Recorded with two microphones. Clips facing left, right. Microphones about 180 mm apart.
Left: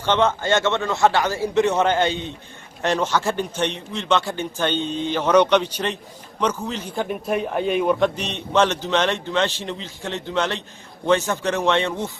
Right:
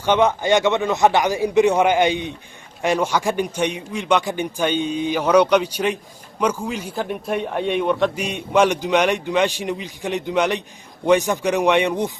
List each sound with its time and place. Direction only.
0.0 s a man's voice: 15° right (ahead or behind)
8.2 s a man's voice: 10° right (ahead or behind)